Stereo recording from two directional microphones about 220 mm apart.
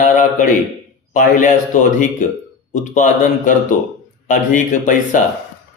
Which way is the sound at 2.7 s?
35° left (ahead or behind).